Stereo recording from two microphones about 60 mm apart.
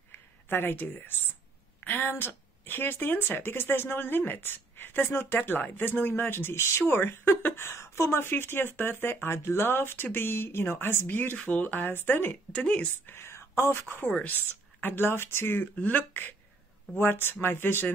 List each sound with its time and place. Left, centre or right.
0.5 s speech: left
12.5 s speech: left
13.0 s speech: left